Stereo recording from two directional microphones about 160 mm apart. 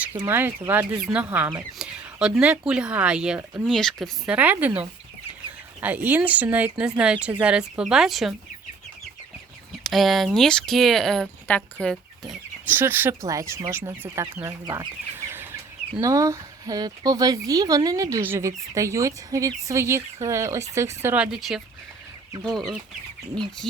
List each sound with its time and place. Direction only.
0.2 s speech: 15° right (ahead or behind); by 4.4 s centre (ahead or behind)
4.4 s speech: 10° right (ahead or behind)
9.8 s speech: centre (ahead or behind)
12.6 s speech: 10° right (ahead or behind)